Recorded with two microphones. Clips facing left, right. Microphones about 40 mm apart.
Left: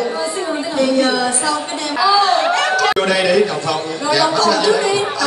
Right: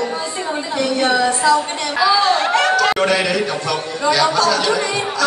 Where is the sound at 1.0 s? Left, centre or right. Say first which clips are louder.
Right 1 dB; right.